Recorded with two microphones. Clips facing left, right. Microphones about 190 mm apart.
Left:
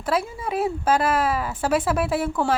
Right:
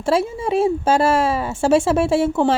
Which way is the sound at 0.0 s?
25° right (ahead or behind).